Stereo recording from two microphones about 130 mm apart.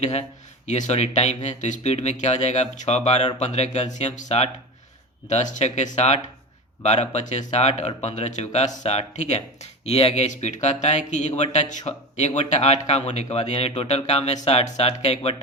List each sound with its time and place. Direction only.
0.0 s speech: 55° left (ahead or behind)
10.2 s speech: 65° left (ahead or behind)